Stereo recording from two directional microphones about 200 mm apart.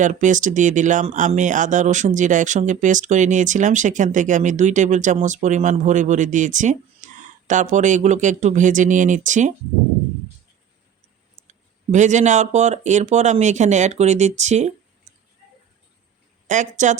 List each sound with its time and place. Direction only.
0.0 s speech: 40° right (ahead or behind)
11.3 s speech: 35° right (ahead or behind)
16.5 s speech: 40° right (ahead or behind)